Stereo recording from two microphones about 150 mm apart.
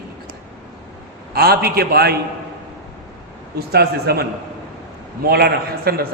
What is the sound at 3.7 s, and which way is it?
A man's voice, 90° right.